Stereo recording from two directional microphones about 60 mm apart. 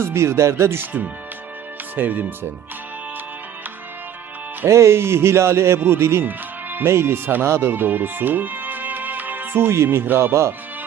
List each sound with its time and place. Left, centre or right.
0.0 s speech: right
2.0 s speech: right
4.6 s speech: right
6.2 s music: right
6.8 s speech: right
7.5 s music: right
9.6 s speech: right